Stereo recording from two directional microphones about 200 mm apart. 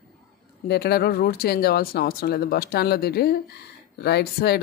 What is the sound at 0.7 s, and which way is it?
A man's voice, 55° left (ahead or behind).